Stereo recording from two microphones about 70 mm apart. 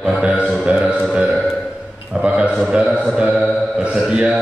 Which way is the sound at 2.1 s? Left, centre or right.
Centre.